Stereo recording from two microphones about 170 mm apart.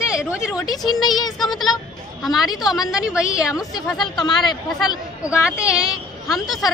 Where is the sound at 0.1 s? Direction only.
5° right (ahead or behind).